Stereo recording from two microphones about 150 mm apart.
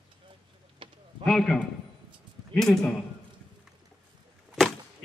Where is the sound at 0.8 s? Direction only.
35° right (ahead or behind).